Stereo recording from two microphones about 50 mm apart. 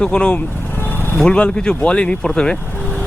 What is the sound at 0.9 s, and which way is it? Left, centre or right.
Vehicle, left.